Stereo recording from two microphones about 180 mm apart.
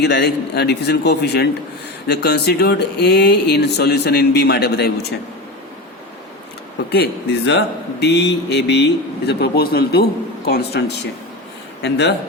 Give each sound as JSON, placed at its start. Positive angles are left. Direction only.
{"t": 0.0, "sound": "speech", "side_deg": 65}
{"t": 6.9, "sound": "speech", "side_deg": 65}
{"t": 11.8, "sound": "speech", "side_deg": 70}